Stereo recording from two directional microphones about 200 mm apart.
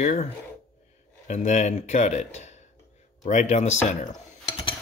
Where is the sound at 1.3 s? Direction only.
35° left (ahead or behind).